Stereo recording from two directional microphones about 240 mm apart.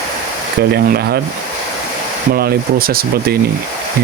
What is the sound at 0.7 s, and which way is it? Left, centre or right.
Speech, right.